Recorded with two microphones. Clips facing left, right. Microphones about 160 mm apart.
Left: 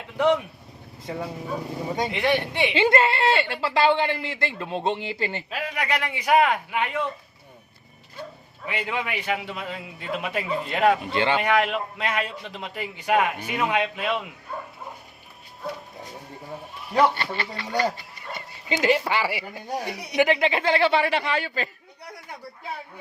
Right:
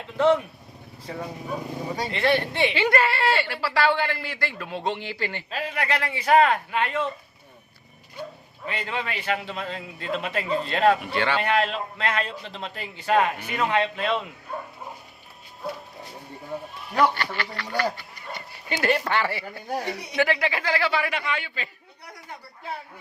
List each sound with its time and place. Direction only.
2.0 s a man's voice: 15° left (ahead or behind)
5.5 s a man's voice: 15° left (ahead or behind)
8.6 s a man's voice: 15° left (ahead or behind)
16.9 s a woman's voice: 25° left (ahead or behind); by 21.7 s 40° left (ahead or behind)